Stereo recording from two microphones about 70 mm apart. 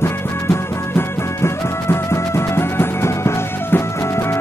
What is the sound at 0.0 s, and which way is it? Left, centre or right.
Music, left.